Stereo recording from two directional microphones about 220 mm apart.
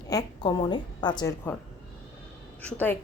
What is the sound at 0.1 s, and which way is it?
A woman's voice, 20° left (ahead or behind).